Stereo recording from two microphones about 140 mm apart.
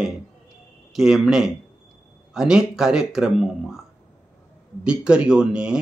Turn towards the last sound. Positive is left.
turn(degrees=-5)  # may be behind; listen again after turning